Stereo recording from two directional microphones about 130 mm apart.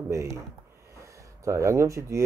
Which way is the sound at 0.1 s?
20° right (ahead or behind).